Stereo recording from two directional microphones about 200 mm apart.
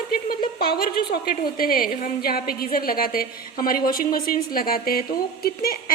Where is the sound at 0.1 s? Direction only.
45° left (ahead or behind).